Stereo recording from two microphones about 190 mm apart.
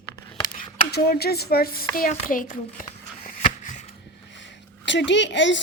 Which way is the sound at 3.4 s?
35° left (ahead or behind).